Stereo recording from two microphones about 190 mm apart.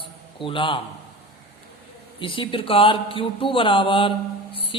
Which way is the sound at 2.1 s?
25° left (ahead or behind).